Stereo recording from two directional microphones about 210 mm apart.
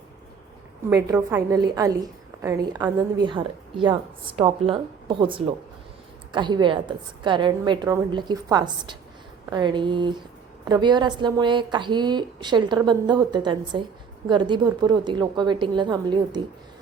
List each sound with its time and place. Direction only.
0.9 s a woman's voice: 10° right (ahead or behind)